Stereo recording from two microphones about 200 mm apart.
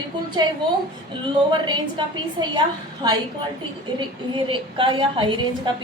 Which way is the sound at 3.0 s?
25° right (ahead or behind).